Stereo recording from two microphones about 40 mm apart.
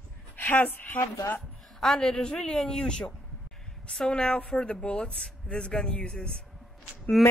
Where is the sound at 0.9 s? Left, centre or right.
Left.